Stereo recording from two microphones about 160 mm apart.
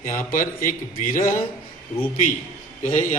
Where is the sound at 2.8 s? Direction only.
50° left (ahead or behind).